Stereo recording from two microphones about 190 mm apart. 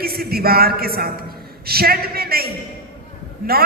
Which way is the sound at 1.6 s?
55° right (ahead or behind).